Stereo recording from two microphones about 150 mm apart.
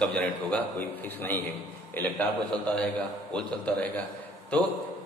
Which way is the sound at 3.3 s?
10° left (ahead or behind).